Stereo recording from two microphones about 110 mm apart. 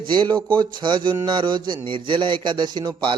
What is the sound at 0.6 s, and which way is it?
A man's voice, 40° right (ahead or behind).